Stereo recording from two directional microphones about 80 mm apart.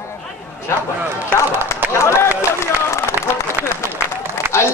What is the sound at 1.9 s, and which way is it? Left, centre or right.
Speech, left.